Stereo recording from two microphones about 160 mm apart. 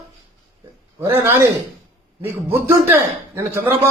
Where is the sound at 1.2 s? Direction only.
15° right (ahead or behind).